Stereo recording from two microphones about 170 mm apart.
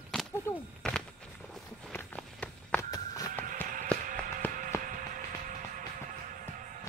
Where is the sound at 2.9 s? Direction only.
20° left (ahead or behind).